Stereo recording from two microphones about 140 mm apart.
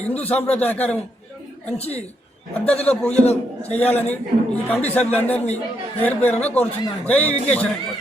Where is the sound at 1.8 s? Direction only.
45° left (ahead or behind).